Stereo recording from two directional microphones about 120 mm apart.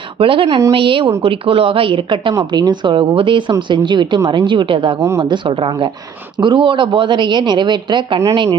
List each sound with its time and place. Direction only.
0.2 s a woman's voice: 50° right (ahead or behind)
4.9 s a woman's voice: 25° right (ahead or behind)
5.2 s a woman's voice: 40° right (ahead or behind)